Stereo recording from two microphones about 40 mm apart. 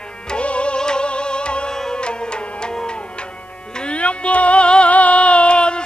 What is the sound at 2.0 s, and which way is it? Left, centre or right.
Music, left.